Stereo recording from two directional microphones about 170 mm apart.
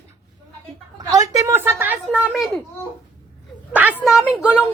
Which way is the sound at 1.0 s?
20° right (ahead or behind).